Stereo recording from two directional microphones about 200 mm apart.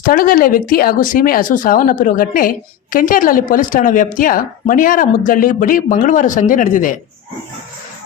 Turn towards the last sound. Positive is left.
turn(degrees=40)  # may be behind; listen again after turning